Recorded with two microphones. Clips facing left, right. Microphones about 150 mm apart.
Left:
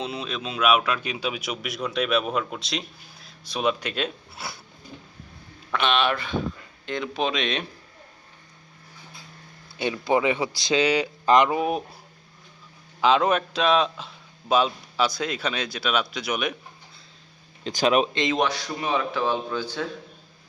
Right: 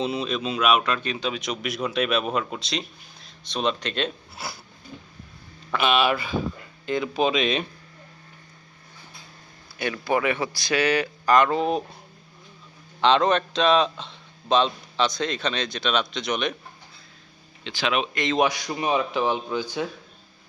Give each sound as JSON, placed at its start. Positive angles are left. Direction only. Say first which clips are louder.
{"t": 0.0, "sound": "speech", "louder": "right 5 dB", "side_deg": 0}
{"t": 5.7, "sound": "speech", "louder": "right 2 dB", "side_deg": -5}
{"t": 9.7, "sound": "a man's voice", "louder": "left 2 dB", "side_deg": 20}
{"t": 13.0, "sound": "a man's voice", "louder": "right 1 dB", "side_deg": 5}
{"t": 17.6, "sound": "speech", "louder": "left 5 dB", "side_deg": 40}
{"t": 18.1, "sound": "a man's voice", "louder": "left 1 dB", "side_deg": 20}
{"t": 18.3, "sound": "speech", "louder": "right 2 dB", "side_deg": -15}